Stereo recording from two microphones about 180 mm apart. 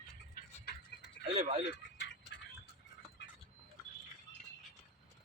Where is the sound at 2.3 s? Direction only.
70° left (ahead or behind).